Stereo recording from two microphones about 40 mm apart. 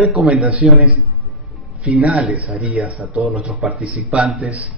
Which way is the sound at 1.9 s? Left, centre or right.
Right.